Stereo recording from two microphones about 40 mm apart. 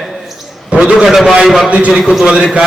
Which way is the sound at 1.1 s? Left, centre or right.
Centre.